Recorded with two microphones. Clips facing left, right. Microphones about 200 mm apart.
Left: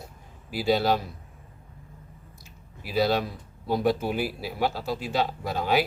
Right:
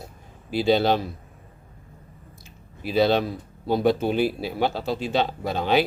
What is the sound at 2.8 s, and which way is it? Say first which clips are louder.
Speech: right 4 dB; 25° right (ahead or behind).